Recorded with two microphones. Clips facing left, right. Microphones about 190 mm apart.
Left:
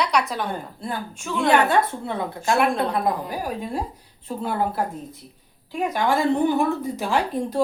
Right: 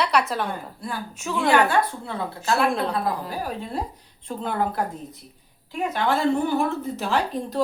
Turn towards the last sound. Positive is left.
turn(degrees=15)  # may be behind; listen again after turning